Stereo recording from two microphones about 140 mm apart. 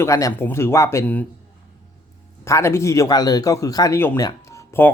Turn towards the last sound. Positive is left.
turn(degrees=20)  # may be behind; listen again after turning